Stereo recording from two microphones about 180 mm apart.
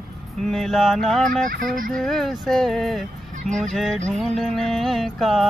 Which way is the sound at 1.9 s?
Centre (ahead or behind).